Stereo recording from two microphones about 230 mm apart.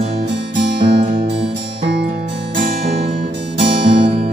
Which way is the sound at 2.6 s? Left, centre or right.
Right.